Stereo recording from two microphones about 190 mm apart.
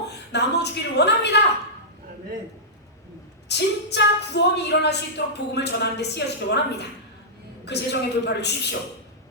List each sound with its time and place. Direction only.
0.1 s a woman's voice: 60° left (ahead or behind)
3.5 s speech: 60° left (ahead or behind)